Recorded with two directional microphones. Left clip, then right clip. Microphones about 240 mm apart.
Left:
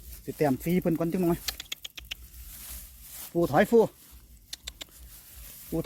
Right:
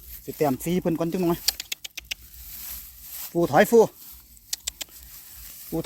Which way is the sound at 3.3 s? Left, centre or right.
Right.